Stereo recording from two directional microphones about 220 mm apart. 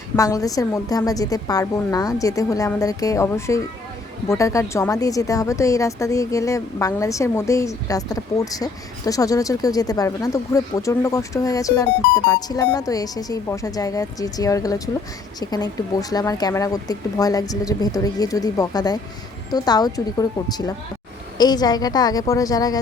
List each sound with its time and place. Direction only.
0.2 s a woman's voice: 15° left (ahead or behind)